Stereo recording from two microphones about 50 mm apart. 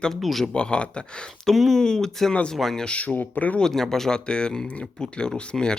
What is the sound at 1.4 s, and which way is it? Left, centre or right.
Speech, centre.